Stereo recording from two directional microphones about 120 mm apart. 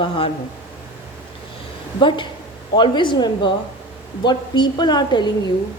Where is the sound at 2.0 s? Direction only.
45° left (ahead or behind).